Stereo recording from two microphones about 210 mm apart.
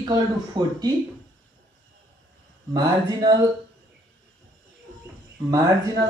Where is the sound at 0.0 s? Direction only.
20° right (ahead or behind).